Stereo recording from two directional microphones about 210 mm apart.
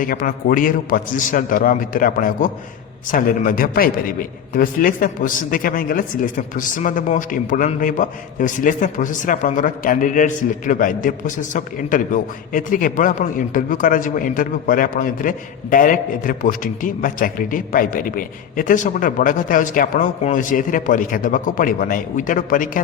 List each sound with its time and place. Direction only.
0.0 s a man's voice: 40° left (ahead or behind)